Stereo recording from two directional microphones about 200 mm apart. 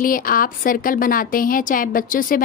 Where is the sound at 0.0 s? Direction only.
45° left (ahead or behind).